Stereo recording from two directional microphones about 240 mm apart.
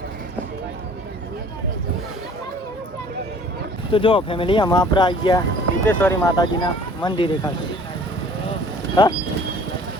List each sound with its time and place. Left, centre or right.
3.9 s speech: left
9.0 s speech: centre